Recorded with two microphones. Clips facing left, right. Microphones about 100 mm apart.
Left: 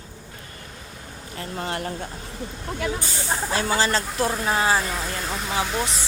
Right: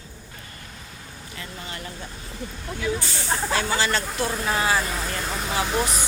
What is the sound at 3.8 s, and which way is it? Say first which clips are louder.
Speech: left 2 dB; 35° left (ahead or behind).